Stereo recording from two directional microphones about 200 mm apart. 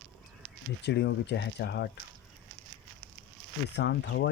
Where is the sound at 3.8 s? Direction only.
60° left (ahead or behind).